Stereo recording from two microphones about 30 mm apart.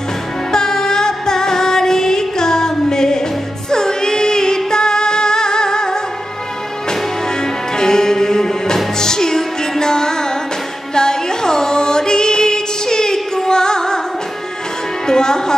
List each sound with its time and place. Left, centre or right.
0.5 s music: centre
7.7 s music: left
15.0 s music: left